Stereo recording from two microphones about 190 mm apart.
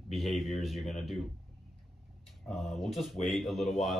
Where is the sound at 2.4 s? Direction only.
Centre (ahead or behind).